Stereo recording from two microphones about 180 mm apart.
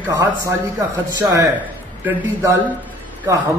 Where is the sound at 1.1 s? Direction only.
20° right (ahead or behind).